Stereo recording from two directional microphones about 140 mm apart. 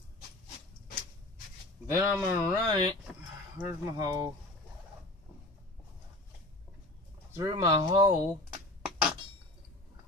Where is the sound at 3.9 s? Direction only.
25° right (ahead or behind).